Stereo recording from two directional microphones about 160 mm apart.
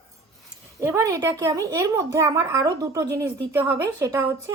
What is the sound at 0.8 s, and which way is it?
A woman's voice, 20° right (ahead or behind).